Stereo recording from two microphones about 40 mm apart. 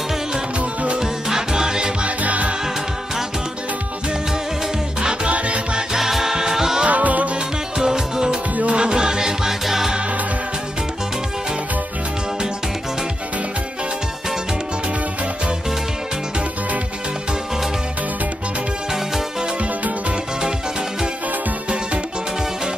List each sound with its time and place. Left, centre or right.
0.9 s music: centre
2.0 s music: right
5.3 s music: right
5.9 s music: centre
6.9 s music: right
7.8 s music: centre